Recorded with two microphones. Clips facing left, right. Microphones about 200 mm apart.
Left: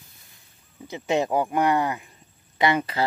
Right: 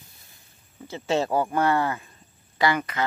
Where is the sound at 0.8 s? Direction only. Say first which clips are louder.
Left 1 dB; 15° left (ahead or behind).